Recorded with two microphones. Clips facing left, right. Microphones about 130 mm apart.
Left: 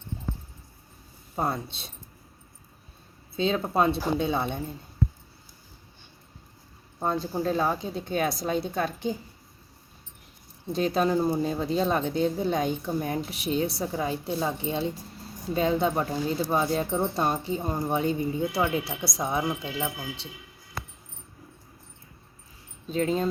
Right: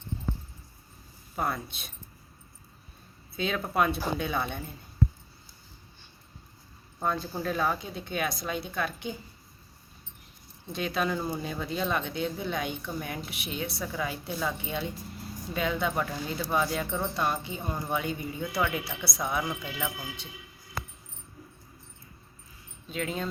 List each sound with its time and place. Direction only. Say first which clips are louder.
1.4 s speech: left 3 dB; 25° left (ahead or behind)
3.3 s speech: left 3 dB; 30° left (ahead or behind)
7.0 s speech: left 3 dB; 30° left (ahead or behind)
10.7 s speech: left 6 dB; 35° left (ahead or behind)
22.9 s speech: left 7 dB; 35° left (ahead or behind)